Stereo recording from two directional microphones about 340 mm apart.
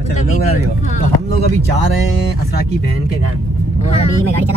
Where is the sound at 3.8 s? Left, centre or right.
Centre.